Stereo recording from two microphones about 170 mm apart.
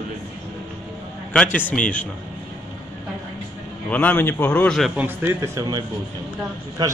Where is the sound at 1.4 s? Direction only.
5° left (ahead or behind).